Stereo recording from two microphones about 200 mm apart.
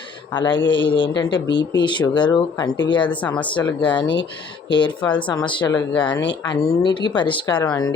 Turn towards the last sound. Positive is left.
turn(degrees=20)  # may be behind; listen again after turning